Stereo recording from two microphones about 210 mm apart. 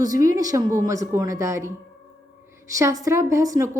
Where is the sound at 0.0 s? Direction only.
15° right (ahead or behind).